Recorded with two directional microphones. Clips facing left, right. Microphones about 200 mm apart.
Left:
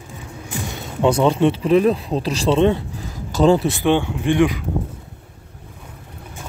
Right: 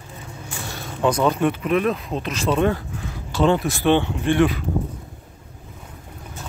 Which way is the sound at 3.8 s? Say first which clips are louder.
Left 1 dB; 15° left (ahead or behind).